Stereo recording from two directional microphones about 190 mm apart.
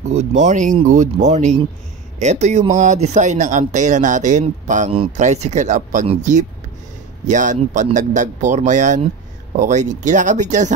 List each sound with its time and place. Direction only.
0.1 s speech: 40° right (ahead or behind)